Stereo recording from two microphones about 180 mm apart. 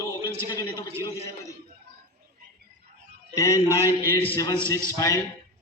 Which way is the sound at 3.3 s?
15° left (ahead or behind).